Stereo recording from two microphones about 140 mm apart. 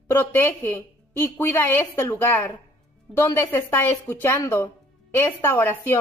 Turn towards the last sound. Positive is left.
turn(degrees=15)  # may be behind; listen again after turning